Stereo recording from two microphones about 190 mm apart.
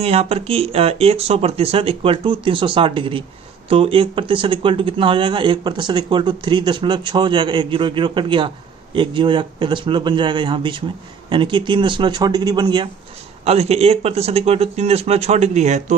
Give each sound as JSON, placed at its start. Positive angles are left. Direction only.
{"t": 0.0, "sound": "speech", "side_deg": -30}
{"t": 13.4, "sound": "speech", "side_deg": -35}